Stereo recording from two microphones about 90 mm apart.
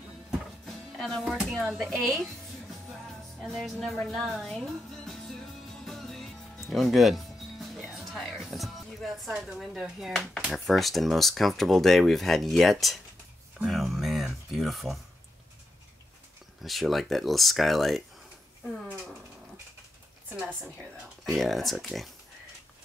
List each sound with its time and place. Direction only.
0.7 s music: 5° left (ahead or behind)
1.2 s speech: centre (ahead or behind)
3.4 s speech: centre (ahead or behind)
3.8 s music: centre (ahead or behind)
10.5 s speech: centre (ahead or behind)
13.7 s a sound: centre (ahead or behind)
16.6 s speech: centre (ahead or behind)
20.3 s a woman's voice: 15° right (ahead or behind)
21.3 s speech: centre (ahead or behind)